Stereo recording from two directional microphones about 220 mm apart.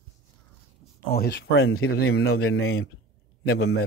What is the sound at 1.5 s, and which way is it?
Speech, 70° left (ahead or behind).